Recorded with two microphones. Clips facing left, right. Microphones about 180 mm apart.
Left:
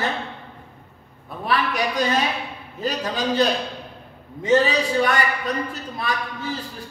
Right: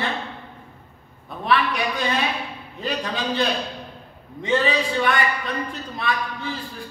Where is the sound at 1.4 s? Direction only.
40° left (ahead or behind).